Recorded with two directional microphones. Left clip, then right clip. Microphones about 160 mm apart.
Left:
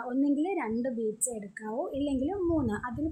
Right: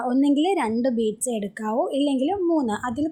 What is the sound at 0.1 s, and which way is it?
A woman's voice, 40° right (ahead or behind).